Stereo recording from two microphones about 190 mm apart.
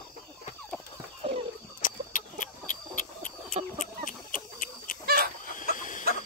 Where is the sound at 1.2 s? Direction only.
30° right (ahead or behind).